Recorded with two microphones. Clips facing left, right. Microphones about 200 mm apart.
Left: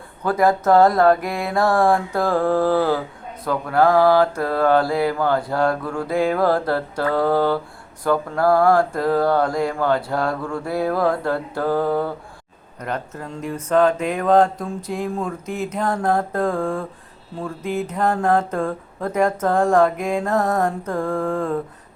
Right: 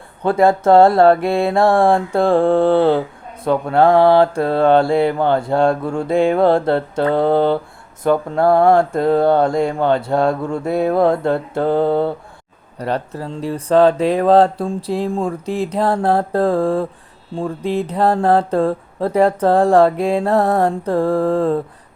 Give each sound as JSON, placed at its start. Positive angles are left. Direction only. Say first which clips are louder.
{"t": 0.2, "sound": "mantra", "louder": "right 4 dB", "side_deg": -25}